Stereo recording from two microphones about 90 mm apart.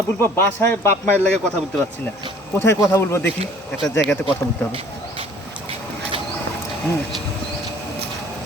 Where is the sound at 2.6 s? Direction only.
30° left (ahead or behind).